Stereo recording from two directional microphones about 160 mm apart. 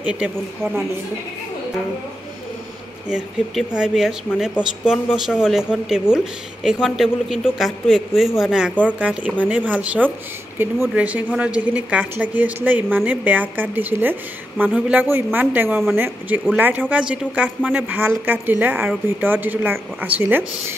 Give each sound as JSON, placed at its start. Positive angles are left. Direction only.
{"t": 0.0, "sound": "speech", "side_deg": -5}
{"t": 3.1, "sound": "a woman's voice", "side_deg": -5}